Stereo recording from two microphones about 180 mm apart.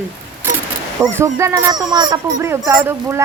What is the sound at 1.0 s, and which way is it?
Speech, 15° right (ahead or behind).